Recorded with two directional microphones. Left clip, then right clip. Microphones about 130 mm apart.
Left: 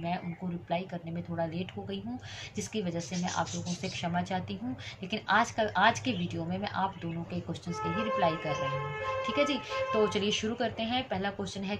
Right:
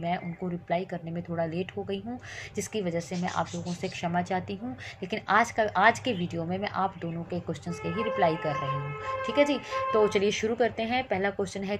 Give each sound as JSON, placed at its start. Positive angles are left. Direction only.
{"t": 0.7, "sound": "a woman's voice", "side_deg": -40}